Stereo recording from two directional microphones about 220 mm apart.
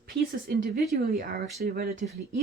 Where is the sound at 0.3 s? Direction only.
40° right (ahead or behind).